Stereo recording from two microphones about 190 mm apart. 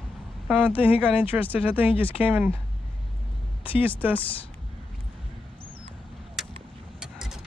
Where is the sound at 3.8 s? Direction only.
10° right (ahead or behind).